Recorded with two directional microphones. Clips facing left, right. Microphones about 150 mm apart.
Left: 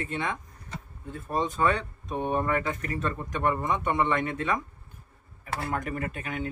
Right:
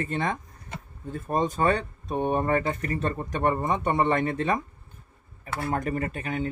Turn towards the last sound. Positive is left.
turn(degrees=-30)  # may be behind; listen again after turning